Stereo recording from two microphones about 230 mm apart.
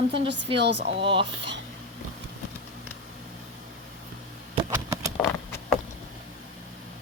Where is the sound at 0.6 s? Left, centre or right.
Right.